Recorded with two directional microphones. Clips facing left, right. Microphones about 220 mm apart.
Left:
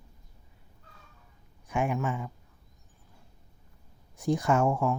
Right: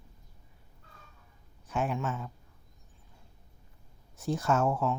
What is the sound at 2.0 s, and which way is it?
Speech, 15° left (ahead or behind).